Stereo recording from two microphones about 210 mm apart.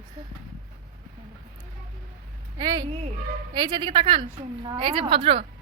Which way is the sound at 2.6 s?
20° right (ahead or behind).